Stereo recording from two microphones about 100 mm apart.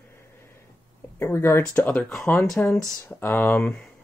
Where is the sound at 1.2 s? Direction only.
25° left (ahead or behind).